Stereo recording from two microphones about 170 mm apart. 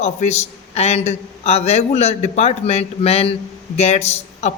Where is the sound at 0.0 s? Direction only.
40° left (ahead or behind).